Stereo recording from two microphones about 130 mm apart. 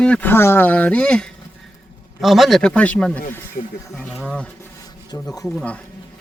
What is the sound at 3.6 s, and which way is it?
Speech, 60° left (ahead or behind).